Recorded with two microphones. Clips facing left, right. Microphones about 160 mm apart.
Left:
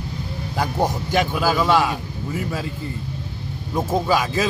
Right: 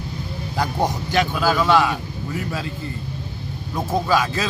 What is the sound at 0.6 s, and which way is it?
A man's voice, 5° left (ahead or behind).